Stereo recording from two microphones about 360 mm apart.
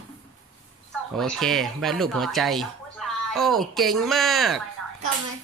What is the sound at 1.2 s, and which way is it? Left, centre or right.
Speech, centre.